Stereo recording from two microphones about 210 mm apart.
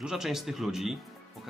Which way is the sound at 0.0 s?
Centre (ahead or behind).